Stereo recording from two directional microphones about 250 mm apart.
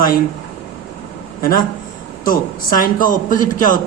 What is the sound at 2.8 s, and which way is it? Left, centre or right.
Speech, left.